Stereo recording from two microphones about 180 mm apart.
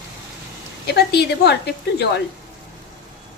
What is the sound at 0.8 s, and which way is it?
A woman's voice, 65° left (ahead or behind).